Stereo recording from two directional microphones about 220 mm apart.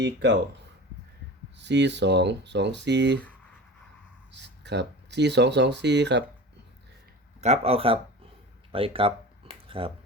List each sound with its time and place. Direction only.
0.0 s speech: 50° right (ahead or behind)
1.5 s speech: 50° right (ahead or behind)
4.3 s speech: 50° right (ahead or behind)
7.4 s speech: 30° right (ahead or behind)
8.7 s a sound: 25° right (ahead or behind)